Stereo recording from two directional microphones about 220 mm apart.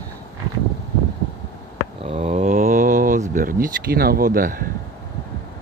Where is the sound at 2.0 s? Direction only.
25° right (ahead or behind).